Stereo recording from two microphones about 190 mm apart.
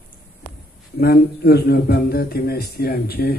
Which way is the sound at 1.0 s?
55° left (ahead or behind).